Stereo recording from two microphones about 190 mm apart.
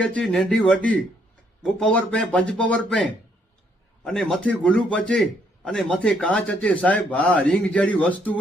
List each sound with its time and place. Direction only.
0.0 s a man's voice: 5° left (ahead or behind)